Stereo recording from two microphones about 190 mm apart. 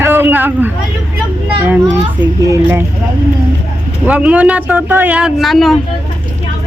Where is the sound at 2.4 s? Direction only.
15° right (ahead or behind).